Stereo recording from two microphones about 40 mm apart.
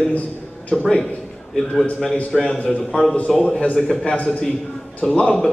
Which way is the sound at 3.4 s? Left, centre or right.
Left.